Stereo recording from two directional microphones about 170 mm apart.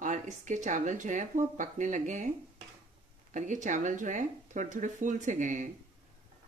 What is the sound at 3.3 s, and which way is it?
Speech, 45° right (ahead or behind).